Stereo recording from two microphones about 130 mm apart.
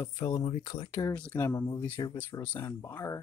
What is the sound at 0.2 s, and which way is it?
Speech, 35° left (ahead or behind).